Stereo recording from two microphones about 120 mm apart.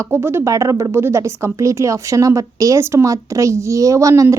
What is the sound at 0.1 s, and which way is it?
A woman's voice, 20° right (ahead or behind).